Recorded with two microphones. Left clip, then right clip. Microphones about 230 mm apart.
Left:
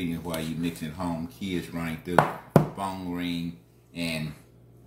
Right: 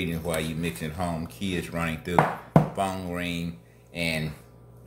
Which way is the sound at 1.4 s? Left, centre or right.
Right.